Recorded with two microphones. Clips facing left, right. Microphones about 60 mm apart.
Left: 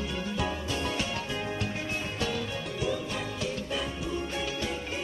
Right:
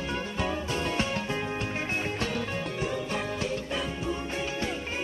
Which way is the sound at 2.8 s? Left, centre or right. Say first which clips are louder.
Left 1 dB; right.